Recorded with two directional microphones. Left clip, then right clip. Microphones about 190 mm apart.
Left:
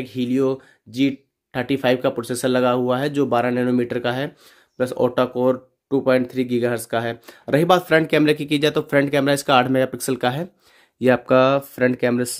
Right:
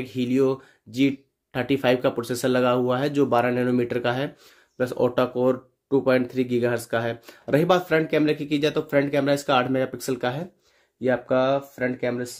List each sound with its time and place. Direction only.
0.0 s speech: 20° left (ahead or behind); by 10.5 s 35° left (ahead or behind)
11.0 s speech: 60° left (ahead or behind)